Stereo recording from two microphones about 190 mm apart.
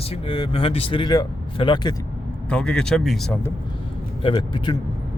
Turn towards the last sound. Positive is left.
turn(degrees=25)  # may be behind; listen again after turning